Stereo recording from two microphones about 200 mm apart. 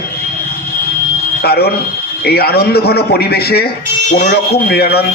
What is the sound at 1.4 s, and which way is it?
A man's voice, 50° left (ahead or behind).